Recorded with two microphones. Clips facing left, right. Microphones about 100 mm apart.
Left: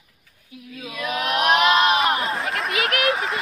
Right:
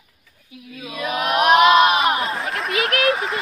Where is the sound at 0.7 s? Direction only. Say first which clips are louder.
Right 2 dB; 10° right (ahead or behind).